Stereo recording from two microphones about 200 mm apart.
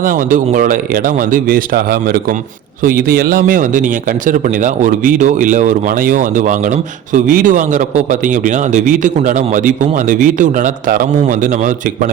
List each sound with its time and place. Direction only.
0.0 s a man's voice: 40° right (ahead or behind)